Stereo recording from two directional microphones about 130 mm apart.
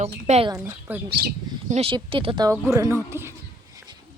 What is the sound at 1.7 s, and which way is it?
Speech, 45° right (ahead or behind).